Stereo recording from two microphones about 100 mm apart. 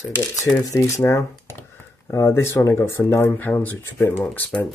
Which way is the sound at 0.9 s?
30° left (ahead or behind).